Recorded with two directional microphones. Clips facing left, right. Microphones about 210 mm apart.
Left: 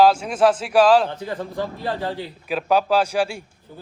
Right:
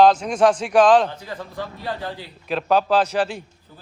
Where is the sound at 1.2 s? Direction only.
30° left (ahead or behind).